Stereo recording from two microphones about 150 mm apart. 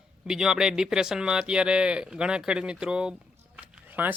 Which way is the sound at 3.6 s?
10° right (ahead or behind).